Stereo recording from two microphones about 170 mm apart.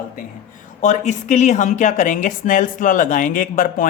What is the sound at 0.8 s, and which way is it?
A woman's voice, 45° left (ahead or behind).